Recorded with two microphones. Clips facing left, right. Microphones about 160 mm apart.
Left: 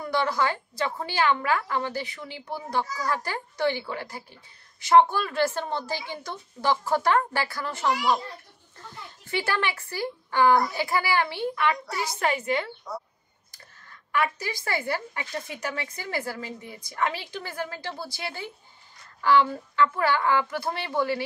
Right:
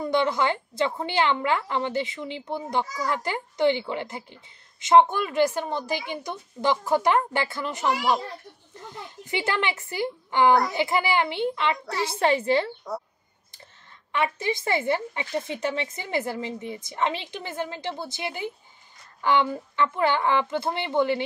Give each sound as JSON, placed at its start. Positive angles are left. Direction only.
{"t": 0.0, "sound": "a woman's voice", "side_deg": -20}